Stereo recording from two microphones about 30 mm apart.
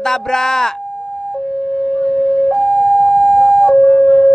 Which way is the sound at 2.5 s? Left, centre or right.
Right.